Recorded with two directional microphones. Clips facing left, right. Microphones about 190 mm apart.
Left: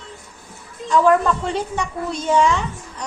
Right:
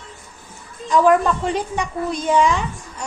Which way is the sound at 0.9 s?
15° right (ahead or behind).